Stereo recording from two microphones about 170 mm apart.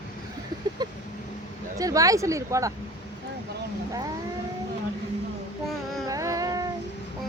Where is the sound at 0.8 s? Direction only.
25° right (ahead or behind).